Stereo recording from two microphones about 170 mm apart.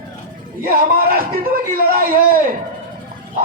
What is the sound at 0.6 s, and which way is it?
A man's voice, 55° right (ahead or behind).